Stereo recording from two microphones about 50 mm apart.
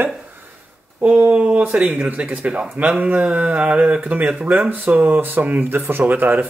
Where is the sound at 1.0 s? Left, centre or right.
Right.